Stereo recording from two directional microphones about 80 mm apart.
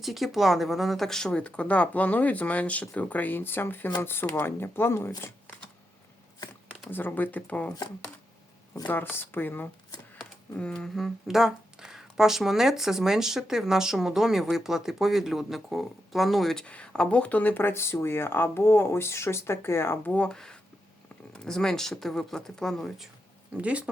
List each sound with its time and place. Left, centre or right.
0.0 s speech: centre; by 5.1 s left
6.9 s speech: left
8.9 s speech: left
10.5 s speech: centre
16.6 s speech: centre; by 20.0 s left
20.1 s speech: centre
23.6 s speech: centre